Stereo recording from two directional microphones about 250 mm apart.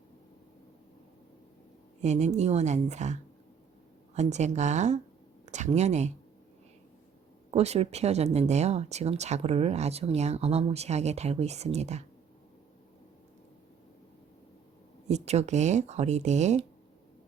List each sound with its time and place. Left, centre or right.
2.0 s speech: right
7.5 s speech: right
15.0 s speech: right